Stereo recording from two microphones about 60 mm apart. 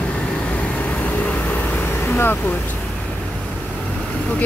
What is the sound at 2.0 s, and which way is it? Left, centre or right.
Vehicle, left.